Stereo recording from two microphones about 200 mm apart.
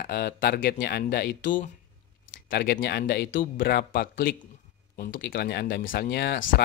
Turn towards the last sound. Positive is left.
turn(degrees=55)  # may be behind; listen again after turning